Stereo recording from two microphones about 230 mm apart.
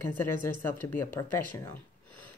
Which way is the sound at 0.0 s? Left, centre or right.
Centre.